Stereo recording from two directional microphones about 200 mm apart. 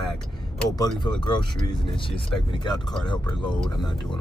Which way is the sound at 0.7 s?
25° left (ahead or behind).